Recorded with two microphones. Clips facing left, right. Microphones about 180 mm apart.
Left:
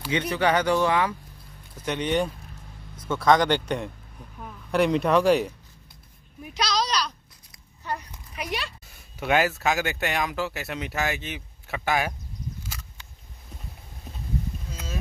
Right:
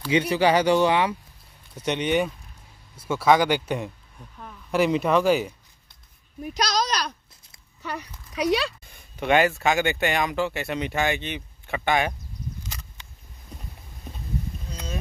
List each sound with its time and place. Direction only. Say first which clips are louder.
0.1 s speech: right 3 dB; 10° right (ahead or behind)
0.6 s speech: right 3 dB; 25° right (ahead or behind)
1.9 s speech: right 2 dB; 10° right (ahead or behind)
6.4 s a woman's voice: right 2 dB; 45° right (ahead or behind)
7.8 s speech: left 1 dB; 90° right
8.9 s speech: right 2 dB; 5° left (ahead or behind)
12.6 s a sound: right 1 dB; 5° left (ahead or behind)
14.7 s boat: right 2 dB; 5° left (ahead or behind)